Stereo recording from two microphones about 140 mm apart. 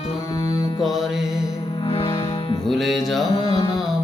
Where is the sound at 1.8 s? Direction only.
40° left (ahead or behind).